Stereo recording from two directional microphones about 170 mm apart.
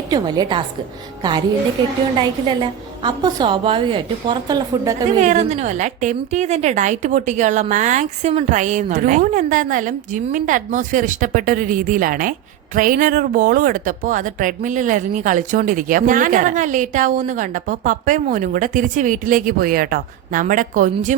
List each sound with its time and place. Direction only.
0.1 s a woman's voice: 25° right (ahead or behind)
2.5 s a woman's voice: 25° right (ahead or behind)
5.2 s a woman's voice: 40° right (ahead or behind)